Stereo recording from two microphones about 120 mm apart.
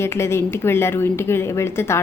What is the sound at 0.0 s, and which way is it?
Speech, 20° left (ahead or behind).